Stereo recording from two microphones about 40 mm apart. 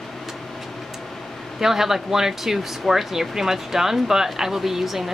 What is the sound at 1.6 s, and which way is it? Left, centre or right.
Speech, centre.